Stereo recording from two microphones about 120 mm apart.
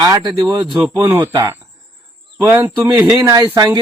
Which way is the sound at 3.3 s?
30° right (ahead or behind).